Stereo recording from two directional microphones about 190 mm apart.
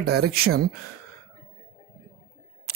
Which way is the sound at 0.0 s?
55° right (ahead or behind).